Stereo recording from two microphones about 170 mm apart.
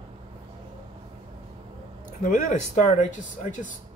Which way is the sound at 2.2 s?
50° left (ahead or behind).